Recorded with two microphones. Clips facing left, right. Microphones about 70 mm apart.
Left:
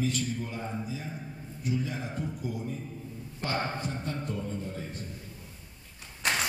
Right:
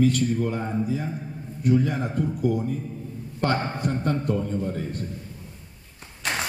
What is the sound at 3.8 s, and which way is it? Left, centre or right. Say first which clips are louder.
A man's voice: right 10 dB; right.